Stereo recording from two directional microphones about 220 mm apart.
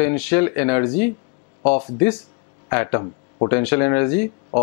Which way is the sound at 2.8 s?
20° left (ahead or behind).